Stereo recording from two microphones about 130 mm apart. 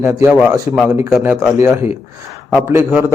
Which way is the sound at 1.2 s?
15° right (ahead or behind).